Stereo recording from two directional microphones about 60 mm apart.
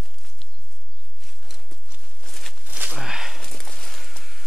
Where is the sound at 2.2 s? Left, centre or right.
Centre.